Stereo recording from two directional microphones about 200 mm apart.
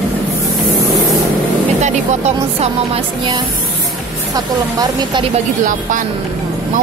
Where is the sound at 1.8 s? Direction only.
35° right (ahead or behind).